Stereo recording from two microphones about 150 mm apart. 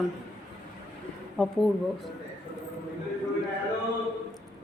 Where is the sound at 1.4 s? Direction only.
Centre (ahead or behind).